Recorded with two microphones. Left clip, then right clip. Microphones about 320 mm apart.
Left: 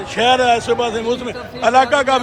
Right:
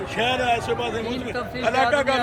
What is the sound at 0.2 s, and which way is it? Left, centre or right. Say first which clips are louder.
A man's voice: left 9 dB; centre.